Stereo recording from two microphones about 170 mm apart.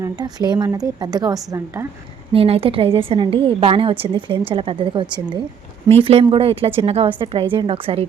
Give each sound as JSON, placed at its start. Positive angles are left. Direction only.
{"t": 0.0, "sound": "a woman's voice", "side_deg": -25}
{"t": 2.3, "sound": "a woman's voice", "side_deg": -35}